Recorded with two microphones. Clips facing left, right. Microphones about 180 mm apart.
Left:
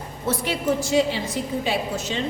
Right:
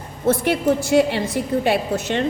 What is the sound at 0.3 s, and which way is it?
A woman's voice, 60° right (ahead or behind).